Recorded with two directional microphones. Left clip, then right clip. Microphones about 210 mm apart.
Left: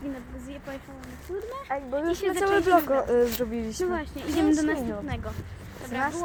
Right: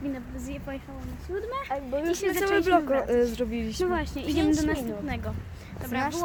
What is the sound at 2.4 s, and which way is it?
Speech, 10° left (ahead or behind).